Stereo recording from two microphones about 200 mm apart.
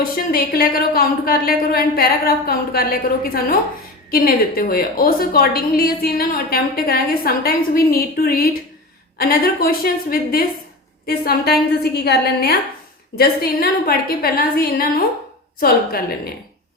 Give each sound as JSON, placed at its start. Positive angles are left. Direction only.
{"t": 0.0, "sound": "a woman's voice", "side_deg": 45}